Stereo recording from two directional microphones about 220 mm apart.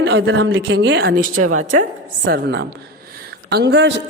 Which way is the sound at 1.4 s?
75° right (ahead or behind).